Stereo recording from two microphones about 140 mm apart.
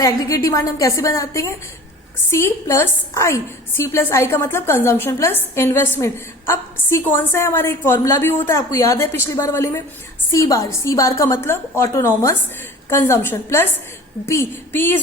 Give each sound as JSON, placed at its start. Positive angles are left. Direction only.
{"t": 0.0, "sound": "a woman's voice", "side_deg": 25}